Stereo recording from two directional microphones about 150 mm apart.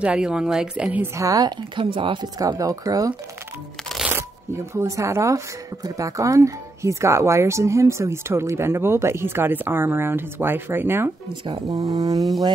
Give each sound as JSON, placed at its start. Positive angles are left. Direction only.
{"t": 0.0, "sound": "speech", "side_deg": -5}
{"t": 2.4, "sound": "speech", "side_deg": -25}
{"t": 4.7, "sound": "speech", "side_deg": -20}